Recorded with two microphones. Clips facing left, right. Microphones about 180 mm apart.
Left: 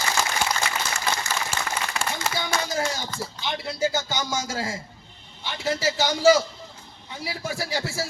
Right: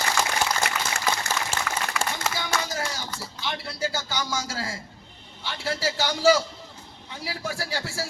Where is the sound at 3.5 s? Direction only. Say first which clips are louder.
Left 4 dB; 20° left (ahead or behind).